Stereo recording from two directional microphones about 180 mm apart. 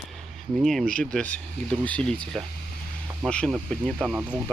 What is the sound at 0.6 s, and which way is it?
Speech, centre (ahead or behind).